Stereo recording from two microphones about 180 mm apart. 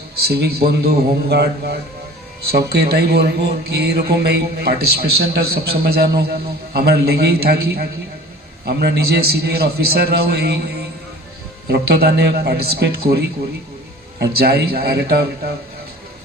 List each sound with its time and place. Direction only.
0.2 s speech: 60° right (ahead or behind)
11.7 s speech: 60° right (ahead or behind)